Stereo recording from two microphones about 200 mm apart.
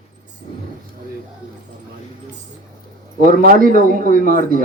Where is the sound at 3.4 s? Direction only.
45° right (ahead or behind).